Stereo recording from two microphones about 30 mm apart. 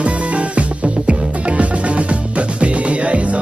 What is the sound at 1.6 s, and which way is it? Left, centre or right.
Music, right.